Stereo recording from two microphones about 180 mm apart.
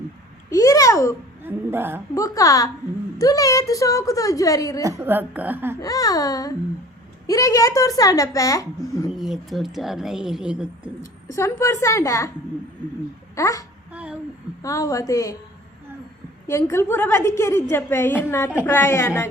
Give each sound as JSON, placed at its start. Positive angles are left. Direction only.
{"t": 0.5, "sound": "babbling", "side_deg": 20}
{"t": 1.5, "sound": "speech", "side_deg": -10}
{"t": 2.1, "sound": "a woman's voice", "side_deg": 20}
{"t": 4.8, "sound": "speech", "side_deg": -15}
{"t": 5.8, "sound": "a woman's voice", "side_deg": 20}
{"t": 9.1, "sound": "a woman's voice", "side_deg": 0}
{"t": 11.0, "sound": "a woman's voice", "side_deg": 15}
{"t": 13.3, "sound": "a woman's voice", "side_deg": 20}
{"t": 13.9, "sound": "a sound", "side_deg": -5}
{"t": 14.6, "sound": "a woman's voice", "side_deg": 15}
{"t": 16.5, "sound": "a woman's voice", "side_deg": 15}